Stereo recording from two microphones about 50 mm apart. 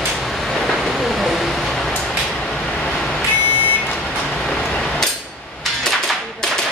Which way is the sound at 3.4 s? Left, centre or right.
Left.